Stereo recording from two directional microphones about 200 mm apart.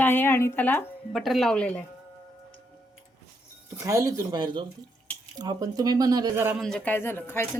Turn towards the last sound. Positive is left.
turn(degrees=10)  # may be behind; listen again after turning